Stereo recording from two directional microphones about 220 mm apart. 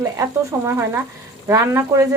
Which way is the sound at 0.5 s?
15° right (ahead or behind).